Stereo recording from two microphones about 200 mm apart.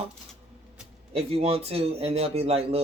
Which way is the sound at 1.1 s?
30° right (ahead or behind).